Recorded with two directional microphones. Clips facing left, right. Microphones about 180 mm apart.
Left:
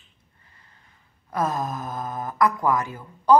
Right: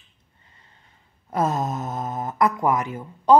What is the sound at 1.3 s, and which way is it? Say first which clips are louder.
Speech: right 2 dB; 25° right (ahead or behind).